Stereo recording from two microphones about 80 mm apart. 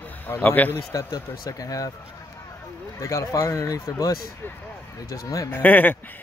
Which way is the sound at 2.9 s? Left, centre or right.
Left.